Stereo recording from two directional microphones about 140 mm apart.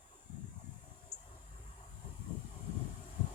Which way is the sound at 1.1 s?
55° left (ahead or behind).